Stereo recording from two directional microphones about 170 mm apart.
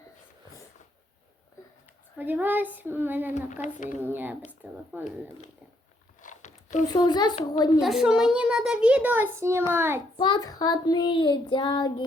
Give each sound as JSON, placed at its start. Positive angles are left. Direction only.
{"t": 2.1, "sound": "a child's voice", "side_deg": -10}
{"t": 3.3, "sound": "a woman's voice", "side_deg": 45}
{"t": 4.0, "sound": "a child's voice", "side_deg": -10}
{"t": 6.2, "sound": "a sound", "side_deg": 45}
{"t": 6.8, "sound": "child singing", "side_deg": 25}
{"t": 7.8, "sound": "a child's voice", "side_deg": 0}
{"t": 10.2, "sound": "child singing", "side_deg": 25}